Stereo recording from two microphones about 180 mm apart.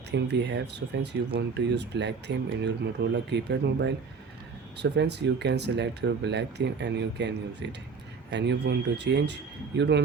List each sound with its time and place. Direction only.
0.1 s speech: 75° right (ahead or behind)